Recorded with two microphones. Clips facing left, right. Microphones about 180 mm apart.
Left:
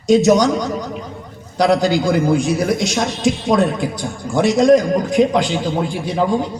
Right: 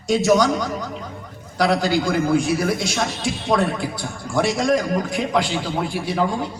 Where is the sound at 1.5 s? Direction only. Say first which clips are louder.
Left 4 dB; 20° left (ahead or behind).